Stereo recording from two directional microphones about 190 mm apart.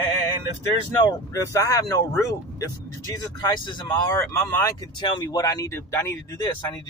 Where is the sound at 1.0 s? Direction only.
15° left (ahead or behind).